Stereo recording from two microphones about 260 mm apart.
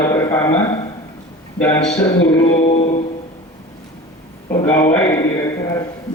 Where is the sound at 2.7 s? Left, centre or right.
Left.